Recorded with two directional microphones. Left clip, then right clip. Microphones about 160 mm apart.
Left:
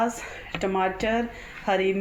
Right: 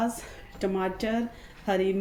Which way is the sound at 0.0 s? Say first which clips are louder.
Left 4 dB; 20° right (ahead or behind).